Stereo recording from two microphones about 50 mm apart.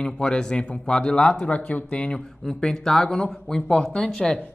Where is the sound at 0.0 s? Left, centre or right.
Centre.